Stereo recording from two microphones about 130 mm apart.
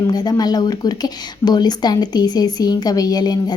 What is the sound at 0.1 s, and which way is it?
A woman's voice, 30° left (ahead or behind).